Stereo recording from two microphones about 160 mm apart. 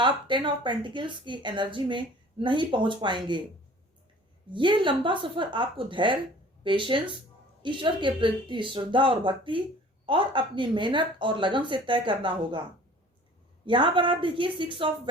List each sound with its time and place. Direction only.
0.0 s a woman's voice: 30° right (ahead or behind)
4.5 s speech: 30° right (ahead or behind)
13.7 s speech: 30° right (ahead or behind)